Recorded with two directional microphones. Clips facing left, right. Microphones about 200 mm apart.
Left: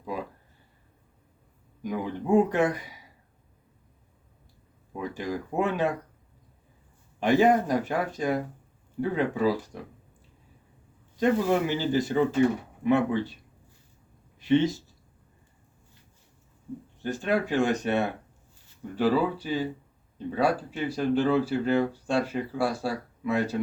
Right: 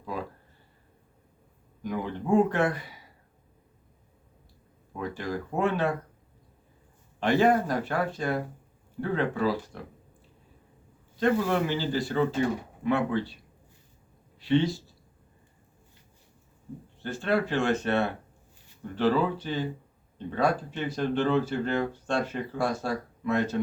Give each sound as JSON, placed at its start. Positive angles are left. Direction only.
{"t": 1.8, "sound": "speech", "side_deg": 15}
{"t": 4.9, "sound": "speech", "side_deg": 15}
{"t": 7.2, "sound": "speech", "side_deg": 15}
{"t": 11.2, "sound": "speech", "side_deg": 15}
{"t": 14.4, "sound": "speech", "side_deg": 20}
{"t": 17.0, "sound": "speech", "side_deg": 15}